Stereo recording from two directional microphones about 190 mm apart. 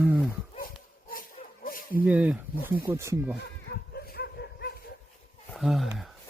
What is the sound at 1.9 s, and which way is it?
Speech, 10° right (ahead or behind).